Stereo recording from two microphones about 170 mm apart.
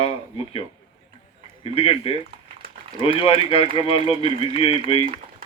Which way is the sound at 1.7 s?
35° left (ahead or behind).